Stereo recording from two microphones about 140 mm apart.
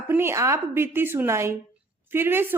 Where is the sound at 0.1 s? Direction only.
15° right (ahead or behind).